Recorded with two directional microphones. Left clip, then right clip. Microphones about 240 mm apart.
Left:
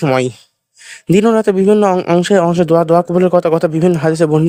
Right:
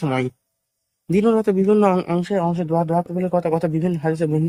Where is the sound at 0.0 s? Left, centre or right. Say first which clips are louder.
Left 9 dB; left.